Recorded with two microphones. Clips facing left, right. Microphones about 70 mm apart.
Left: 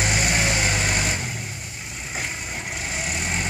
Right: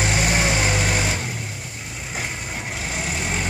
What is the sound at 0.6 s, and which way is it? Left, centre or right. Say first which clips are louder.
Vehicle: right 2 dB; centre.